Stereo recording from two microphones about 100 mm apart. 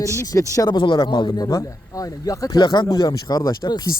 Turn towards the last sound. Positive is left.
turn(degrees=40)  # may be behind; listen again after turning